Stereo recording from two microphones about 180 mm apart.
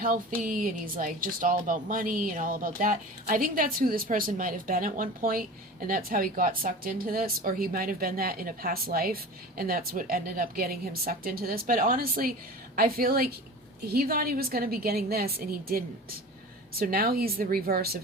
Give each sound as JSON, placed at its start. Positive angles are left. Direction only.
{"t": 0.0, "sound": "a woman's voice", "side_deg": -50}
{"t": 16.7, "sound": "a woman's voice", "side_deg": -55}